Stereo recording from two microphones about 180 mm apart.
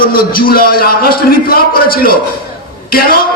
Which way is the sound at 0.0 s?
55° left (ahead or behind).